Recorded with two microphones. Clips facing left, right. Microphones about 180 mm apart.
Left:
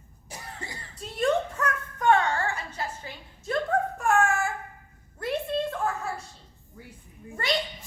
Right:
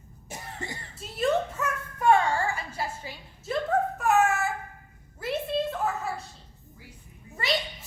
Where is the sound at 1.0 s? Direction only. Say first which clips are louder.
Left 1 dB; 5° right (ahead or behind).